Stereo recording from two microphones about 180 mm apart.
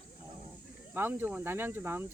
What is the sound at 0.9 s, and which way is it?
Speech, 10° right (ahead or behind).